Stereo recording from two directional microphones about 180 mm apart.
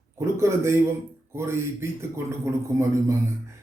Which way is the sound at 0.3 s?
15° right (ahead or behind).